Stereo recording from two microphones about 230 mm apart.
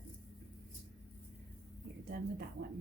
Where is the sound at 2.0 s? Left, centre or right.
Right.